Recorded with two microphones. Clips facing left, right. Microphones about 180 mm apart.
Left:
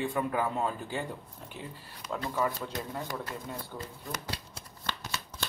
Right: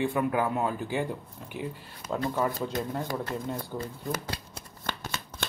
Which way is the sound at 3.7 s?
25° right (ahead or behind).